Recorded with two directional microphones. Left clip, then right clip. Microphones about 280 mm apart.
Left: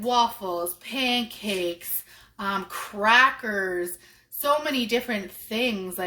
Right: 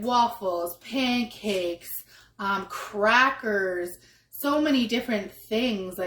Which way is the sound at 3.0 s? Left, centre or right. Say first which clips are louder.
Left 2 dB; left.